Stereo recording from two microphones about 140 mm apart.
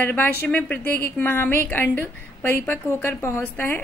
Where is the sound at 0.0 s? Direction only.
15° left (ahead or behind).